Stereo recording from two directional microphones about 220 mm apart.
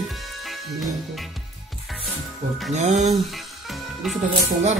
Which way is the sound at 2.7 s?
30° right (ahead or behind).